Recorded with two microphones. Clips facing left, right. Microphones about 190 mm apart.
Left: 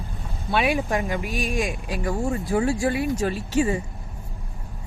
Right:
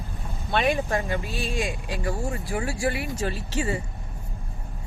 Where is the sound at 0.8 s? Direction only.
15° left (ahead or behind).